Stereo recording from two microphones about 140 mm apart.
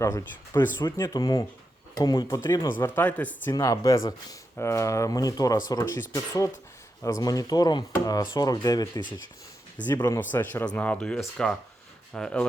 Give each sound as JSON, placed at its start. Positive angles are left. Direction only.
{"t": 0.0, "sound": "speech", "side_deg": 20}
{"t": 3.5, "sound": "speech", "side_deg": 25}
{"t": 10.2, "sound": "speech", "side_deg": 15}